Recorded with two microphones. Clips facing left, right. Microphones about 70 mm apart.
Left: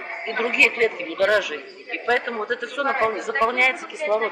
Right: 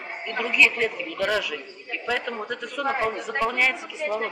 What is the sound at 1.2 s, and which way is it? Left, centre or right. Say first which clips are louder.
Speech: left 6 dB; left.